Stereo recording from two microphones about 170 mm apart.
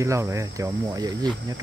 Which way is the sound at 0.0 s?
15° right (ahead or behind).